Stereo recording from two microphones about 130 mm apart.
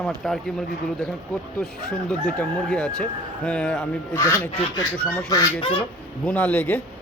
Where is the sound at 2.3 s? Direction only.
5° left (ahead or behind).